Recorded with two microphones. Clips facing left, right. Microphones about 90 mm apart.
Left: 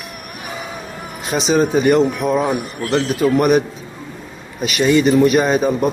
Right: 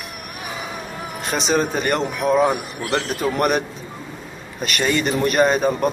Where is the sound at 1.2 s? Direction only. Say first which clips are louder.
Left 4 dB; centre (ahead or behind).